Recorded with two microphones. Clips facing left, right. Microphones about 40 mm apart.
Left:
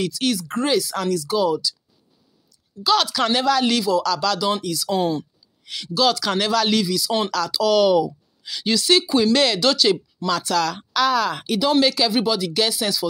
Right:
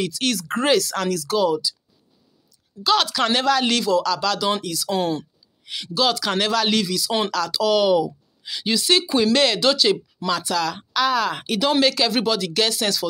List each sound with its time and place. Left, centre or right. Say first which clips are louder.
0.2 s speech: left 1 dB; right
0.7 s speech: right 1 dB; right
1.4 s speech: right 1 dB; right
2.8 s speech: even; right
4.0 s speech: left 1 dB; right
4.9 s speech: left 1 dB; right
5.7 s speech: left 2 dB; right
6.8 s speech: left 1 dB; right
7.3 s speech: left 1 dB; right
7.7 s speech: left 2 dB; right
11.1 s speech: left 1 dB; right
11.5 s speech: left 1 dB; right